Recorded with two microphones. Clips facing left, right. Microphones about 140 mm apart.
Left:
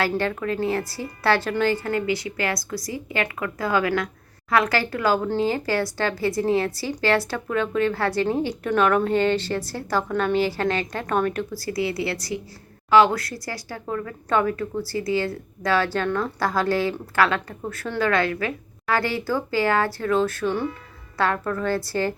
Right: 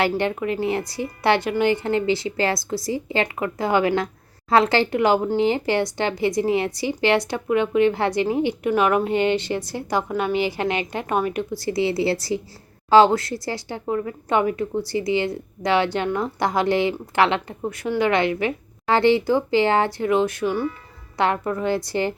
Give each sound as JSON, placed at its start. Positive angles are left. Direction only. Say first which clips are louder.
{"t": 0.0, "sound": "a woman's voice", "louder": "right 2 dB", "side_deg": -20}
{"t": 11.5, "sound": "speech", "louder": "right 4 dB", "side_deg": -25}